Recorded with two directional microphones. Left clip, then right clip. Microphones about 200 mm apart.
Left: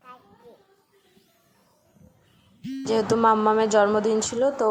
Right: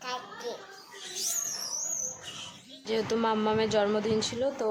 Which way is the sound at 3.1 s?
10° left (ahead or behind).